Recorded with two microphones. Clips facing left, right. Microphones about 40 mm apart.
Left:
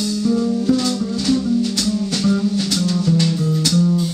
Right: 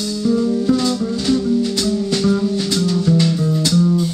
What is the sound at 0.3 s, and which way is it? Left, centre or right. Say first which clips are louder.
Music: right 2 dB; centre.